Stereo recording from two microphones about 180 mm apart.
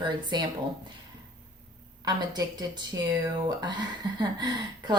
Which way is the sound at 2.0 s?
20° right (ahead or behind).